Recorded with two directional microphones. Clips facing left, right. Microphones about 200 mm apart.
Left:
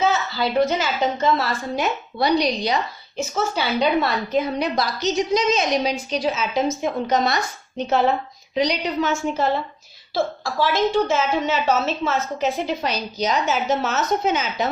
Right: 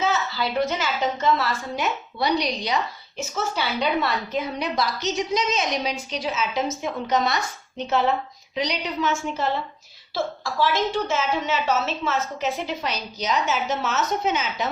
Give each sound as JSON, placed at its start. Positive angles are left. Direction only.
{"t": 0.0, "sound": "a woman's voice", "side_deg": 35}